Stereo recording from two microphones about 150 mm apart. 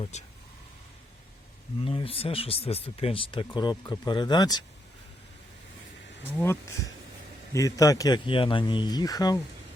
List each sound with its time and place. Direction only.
0.0 s speech: 50° left (ahead or behind)
1.8 s speech: 35° left (ahead or behind)
7.5 s speech: 20° left (ahead or behind)